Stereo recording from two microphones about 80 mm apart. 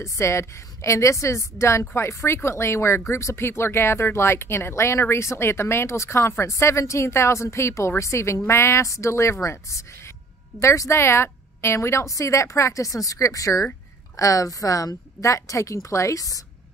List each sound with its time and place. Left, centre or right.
0.0 s a woman's voice: left